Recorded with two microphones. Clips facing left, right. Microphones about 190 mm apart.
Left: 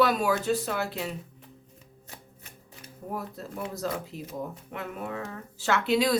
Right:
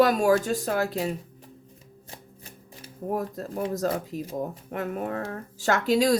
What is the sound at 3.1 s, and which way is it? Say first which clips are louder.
A woman's voice: right 6 dB; 40° right (ahead or behind).